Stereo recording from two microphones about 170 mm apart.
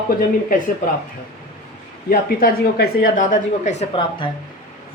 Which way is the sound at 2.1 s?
60° left (ahead or behind).